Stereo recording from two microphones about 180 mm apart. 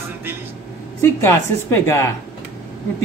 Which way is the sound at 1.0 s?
15° left (ahead or behind).